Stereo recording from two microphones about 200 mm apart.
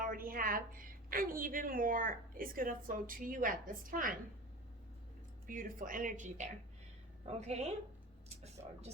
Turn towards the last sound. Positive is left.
turn(degrees=-30)  # may be behind; listen again after turning